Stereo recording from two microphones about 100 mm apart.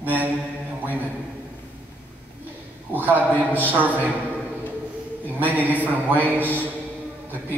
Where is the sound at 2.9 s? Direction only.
15° right (ahead or behind).